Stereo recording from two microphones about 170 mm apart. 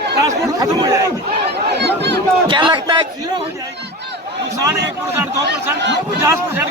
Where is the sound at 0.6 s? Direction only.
20° right (ahead or behind).